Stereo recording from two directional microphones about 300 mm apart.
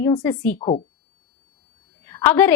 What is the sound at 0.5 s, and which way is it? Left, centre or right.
Speech, centre.